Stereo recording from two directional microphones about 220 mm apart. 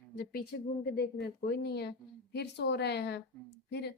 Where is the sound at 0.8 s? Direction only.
50° left (ahead or behind).